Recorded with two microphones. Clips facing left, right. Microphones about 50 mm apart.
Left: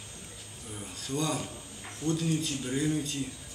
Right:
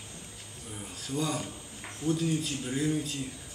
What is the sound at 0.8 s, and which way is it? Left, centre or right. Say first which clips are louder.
A man's voice: even; centre.